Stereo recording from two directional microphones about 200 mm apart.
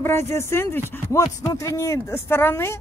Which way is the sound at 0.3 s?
15° left (ahead or behind).